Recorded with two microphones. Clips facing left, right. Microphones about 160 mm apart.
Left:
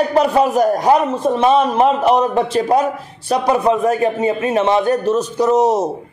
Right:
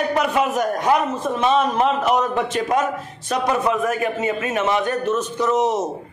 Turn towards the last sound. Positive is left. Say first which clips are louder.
# left 5 dB
turn(degrees=35)  # may be behind; listen again after turning